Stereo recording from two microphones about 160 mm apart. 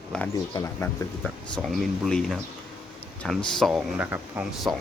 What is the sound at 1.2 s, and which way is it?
Speech, centre (ahead or behind).